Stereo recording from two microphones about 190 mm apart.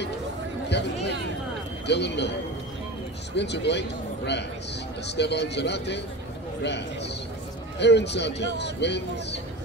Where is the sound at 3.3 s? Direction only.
65° left (ahead or behind).